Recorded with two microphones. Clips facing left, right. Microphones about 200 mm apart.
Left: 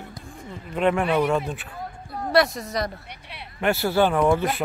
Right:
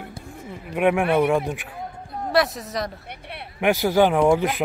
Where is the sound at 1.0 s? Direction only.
55° right (ahead or behind).